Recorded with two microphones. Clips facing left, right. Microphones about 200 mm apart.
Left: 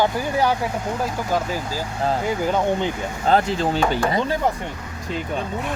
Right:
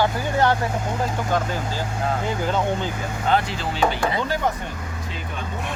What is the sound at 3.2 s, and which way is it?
Speech, 40° left (ahead or behind).